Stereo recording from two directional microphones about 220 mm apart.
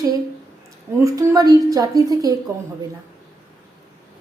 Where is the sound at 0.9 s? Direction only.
15° right (ahead or behind).